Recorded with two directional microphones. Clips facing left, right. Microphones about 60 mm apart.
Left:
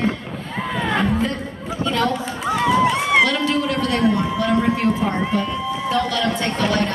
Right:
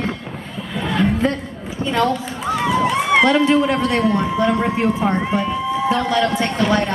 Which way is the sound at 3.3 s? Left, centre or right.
Right.